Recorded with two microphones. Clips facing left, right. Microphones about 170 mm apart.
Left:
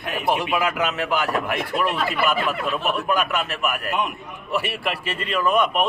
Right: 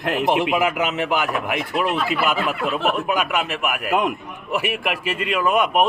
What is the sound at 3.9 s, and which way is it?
Speech, 90° right.